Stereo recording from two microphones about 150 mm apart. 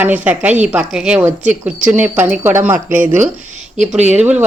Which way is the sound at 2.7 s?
60° right (ahead or behind).